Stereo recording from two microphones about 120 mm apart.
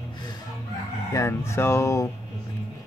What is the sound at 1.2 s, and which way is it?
Music, 25° left (ahead or behind).